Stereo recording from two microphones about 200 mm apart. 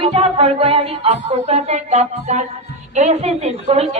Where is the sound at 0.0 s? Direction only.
30° right (ahead or behind).